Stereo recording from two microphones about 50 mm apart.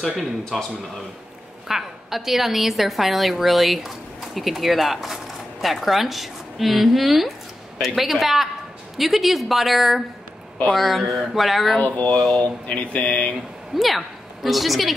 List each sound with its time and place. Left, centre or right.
0.2 s a woman's voice: centre
1.7 s a woman's voice: centre
12.4 s speech: left
13.7 s a woman's voice: centre